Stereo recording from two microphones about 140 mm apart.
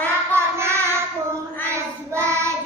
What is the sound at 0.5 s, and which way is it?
Child singing, 20° right (ahead or behind).